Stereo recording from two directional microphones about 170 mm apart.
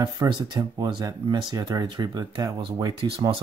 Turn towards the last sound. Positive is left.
turn(degrees=-20)  # may be behind; listen again after turning